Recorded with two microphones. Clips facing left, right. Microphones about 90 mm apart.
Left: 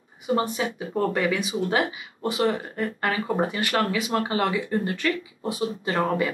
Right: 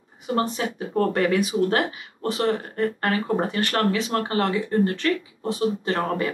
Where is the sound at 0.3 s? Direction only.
5° left (ahead or behind).